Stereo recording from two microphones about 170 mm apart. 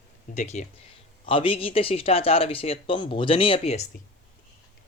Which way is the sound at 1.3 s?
30° left (ahead or behind).